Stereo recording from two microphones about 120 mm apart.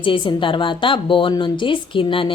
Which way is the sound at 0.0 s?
45° left (ahead or behind).